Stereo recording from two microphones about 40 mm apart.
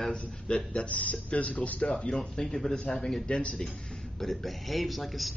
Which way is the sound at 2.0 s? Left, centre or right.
Centre.